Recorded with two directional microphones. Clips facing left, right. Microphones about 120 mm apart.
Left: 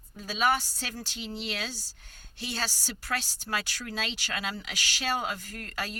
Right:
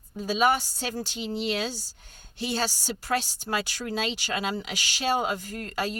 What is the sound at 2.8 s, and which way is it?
Speech, 20° right (ahead or behind).